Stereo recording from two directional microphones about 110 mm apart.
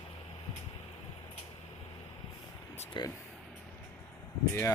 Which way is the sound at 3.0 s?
45° left (ahead or behind).